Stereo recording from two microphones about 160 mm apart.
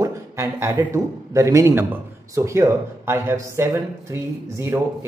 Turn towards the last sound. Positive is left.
turn(degrees=-15)  # may be behind; listen again after turning